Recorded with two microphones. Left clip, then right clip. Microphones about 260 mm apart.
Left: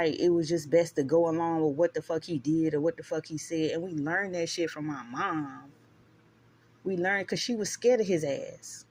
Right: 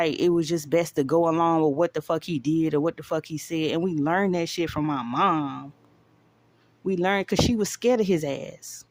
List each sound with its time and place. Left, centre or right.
0.0 s speech: right
6.8 s speech: right